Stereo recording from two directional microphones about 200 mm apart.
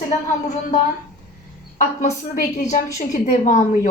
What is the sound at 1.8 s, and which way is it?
A woman's voice, 35° left (ahead or behind).